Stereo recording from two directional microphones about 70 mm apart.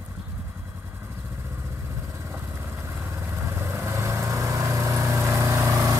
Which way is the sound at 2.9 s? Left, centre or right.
Right.